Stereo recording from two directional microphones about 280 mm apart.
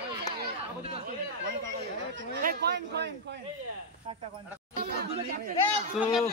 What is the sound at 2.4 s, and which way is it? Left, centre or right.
Speech, right.